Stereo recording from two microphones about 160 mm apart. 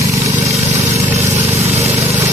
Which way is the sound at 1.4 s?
15° right (ahead or behind).